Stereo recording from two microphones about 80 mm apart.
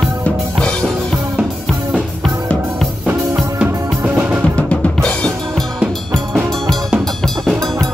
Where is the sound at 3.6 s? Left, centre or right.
Centre.